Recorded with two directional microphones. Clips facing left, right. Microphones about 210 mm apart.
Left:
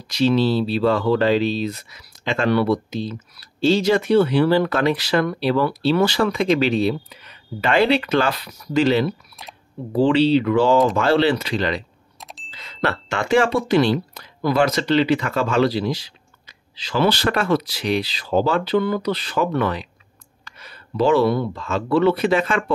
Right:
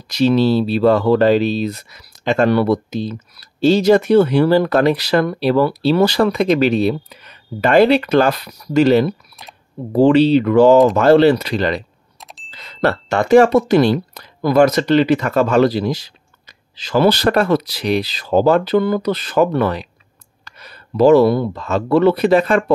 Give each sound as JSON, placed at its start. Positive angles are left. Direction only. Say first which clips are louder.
{"t": 0.1, "sound": "speech", "louder": "right 4 dB", "side_deg": -45}
{"t": 12.2, "sound": "bicycle bell", "louder": "even", "side_deg": 0}
{"t": 12.4, "sound": "speech", "louder": "right 6 dB", "side_deg": -40}